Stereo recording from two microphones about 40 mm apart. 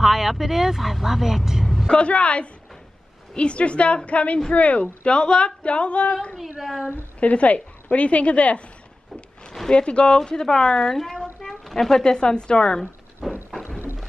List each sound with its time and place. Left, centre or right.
0.0 s a woman's voice: centre
1.9 s a woman's voice: left
7.2 s a woman's voice: left
9.7 s speech: left
13.2 s a sound: centre